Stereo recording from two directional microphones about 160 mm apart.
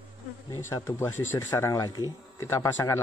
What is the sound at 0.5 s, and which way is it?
Speech, 20° left (ahead or behind).